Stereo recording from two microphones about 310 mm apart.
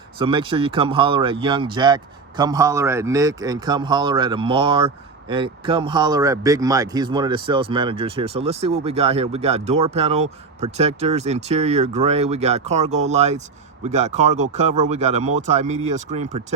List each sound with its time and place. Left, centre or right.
0.2 s a man's voice: centre